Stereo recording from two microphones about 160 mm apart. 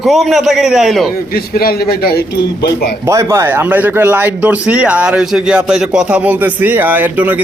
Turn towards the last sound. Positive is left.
turn(degrees=-10)  # may be behind; listen again after turning